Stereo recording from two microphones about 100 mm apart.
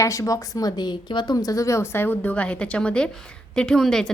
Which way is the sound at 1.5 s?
35° left (ahead or behind).